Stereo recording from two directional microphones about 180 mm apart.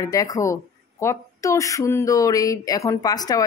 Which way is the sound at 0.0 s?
20° left (ahead or behind).